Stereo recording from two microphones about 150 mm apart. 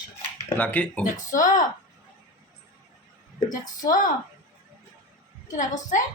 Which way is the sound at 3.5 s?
25° left (ahead or behind).